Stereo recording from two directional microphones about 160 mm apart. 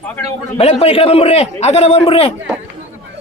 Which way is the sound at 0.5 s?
40° left (ahead or behind).